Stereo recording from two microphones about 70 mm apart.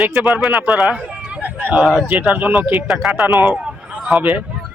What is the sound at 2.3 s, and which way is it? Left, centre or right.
Speech, right.